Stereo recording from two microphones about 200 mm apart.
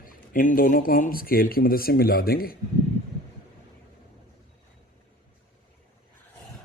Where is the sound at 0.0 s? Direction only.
45° left (ahead or behind).